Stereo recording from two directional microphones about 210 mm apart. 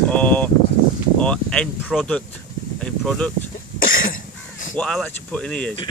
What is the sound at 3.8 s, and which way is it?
Cough, 40° left (ahead or behind).